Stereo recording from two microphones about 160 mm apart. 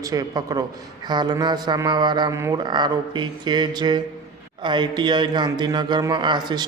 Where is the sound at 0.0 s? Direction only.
25° right (ahead or behind).